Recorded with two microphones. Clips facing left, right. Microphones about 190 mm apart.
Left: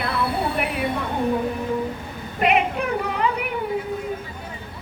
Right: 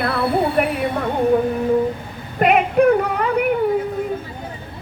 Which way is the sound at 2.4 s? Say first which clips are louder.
Right 6 dB; 50° right (ahead or behind).